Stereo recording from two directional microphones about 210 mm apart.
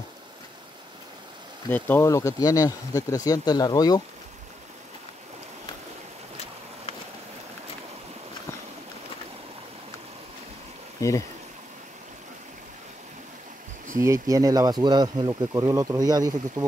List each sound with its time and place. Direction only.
1.7 s speech: 10° left (ahead or behind)
11.0 s speech: 15° left (ahead or behind)
13.9 s speech: 15° right (ahead or behind)